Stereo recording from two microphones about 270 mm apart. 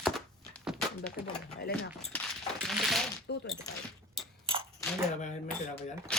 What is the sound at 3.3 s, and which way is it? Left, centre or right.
Speech, left.